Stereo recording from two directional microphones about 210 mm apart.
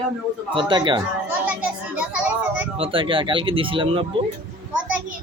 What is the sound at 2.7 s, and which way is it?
A man's voice, 25° right (ahead or behind).